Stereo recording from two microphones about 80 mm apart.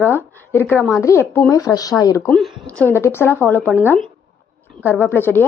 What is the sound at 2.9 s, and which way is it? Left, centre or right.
Speech, left.